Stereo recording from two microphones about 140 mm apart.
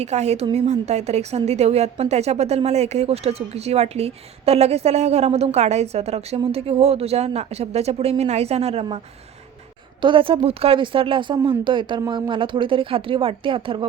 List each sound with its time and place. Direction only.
0.0 s a woman's voice: 50° right (ahead or behind)
10.0 s speech: 40° right (ahead or behind)